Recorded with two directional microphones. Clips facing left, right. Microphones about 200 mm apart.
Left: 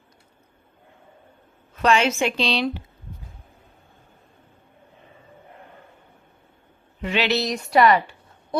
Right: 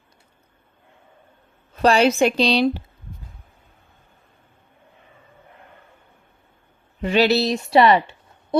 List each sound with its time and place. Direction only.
1.7 s a woman's voice: 35° right (ahead or behind)
7.0 s speech: 35° right (ahead or behind)